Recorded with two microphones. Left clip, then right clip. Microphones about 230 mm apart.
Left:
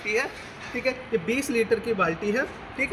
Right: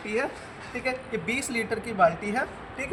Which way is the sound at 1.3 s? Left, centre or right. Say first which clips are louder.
Left 6 dB; right.